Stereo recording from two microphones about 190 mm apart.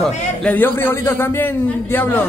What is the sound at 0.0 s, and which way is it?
A man's voice, 5° left (ahead or behind).